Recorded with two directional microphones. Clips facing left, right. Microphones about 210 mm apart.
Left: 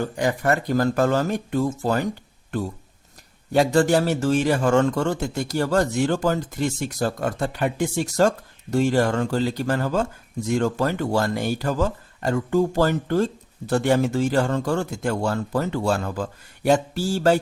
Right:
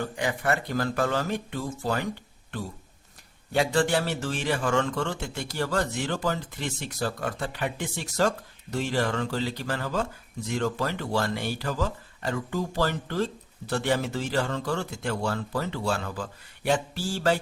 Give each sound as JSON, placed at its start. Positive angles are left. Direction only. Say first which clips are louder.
{"t": 0.0, "sound": "speech", "louder": "left 6 dB", "side_deg": 45}
{"t": 3.5, "sound": "speech", "louder": "left 6 dB", "side_deg": 40}